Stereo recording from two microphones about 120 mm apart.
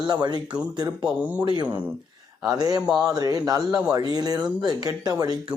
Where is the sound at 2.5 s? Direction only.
30° right (ahead or behind).